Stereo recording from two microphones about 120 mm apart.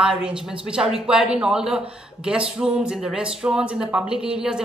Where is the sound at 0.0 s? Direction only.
5° right (ahead or behind).